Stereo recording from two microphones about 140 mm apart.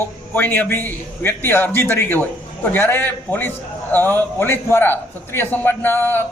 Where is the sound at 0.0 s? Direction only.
15° left (ahead or behind).